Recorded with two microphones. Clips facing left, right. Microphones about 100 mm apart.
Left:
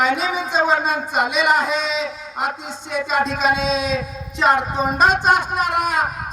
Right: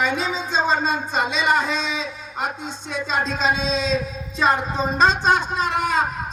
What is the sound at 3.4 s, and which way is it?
Speech, 60° left (ahead or behind).